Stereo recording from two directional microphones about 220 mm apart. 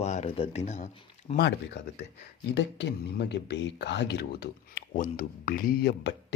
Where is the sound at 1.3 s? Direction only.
50° left (ahead or behind).